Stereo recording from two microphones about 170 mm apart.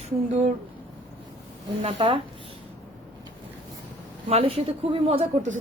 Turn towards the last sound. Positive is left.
turn(degrees=-40)  # may be behind; listen again after turning